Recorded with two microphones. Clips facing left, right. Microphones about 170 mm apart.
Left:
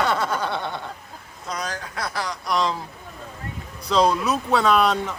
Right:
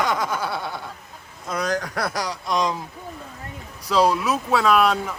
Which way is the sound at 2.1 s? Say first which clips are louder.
Right 1 dB; 40° right (ahead or behind).